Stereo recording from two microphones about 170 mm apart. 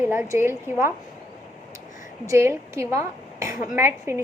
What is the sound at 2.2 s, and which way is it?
A woman's voice, 15° right (ahead or behind).